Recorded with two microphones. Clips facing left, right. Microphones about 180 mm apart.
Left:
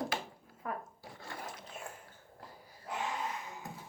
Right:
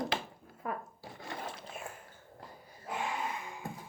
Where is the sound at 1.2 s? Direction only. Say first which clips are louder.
Right 3 dB; 20° right (ahead or behind).